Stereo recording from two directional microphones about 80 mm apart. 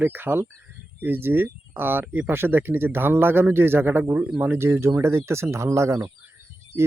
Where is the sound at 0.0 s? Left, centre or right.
Right.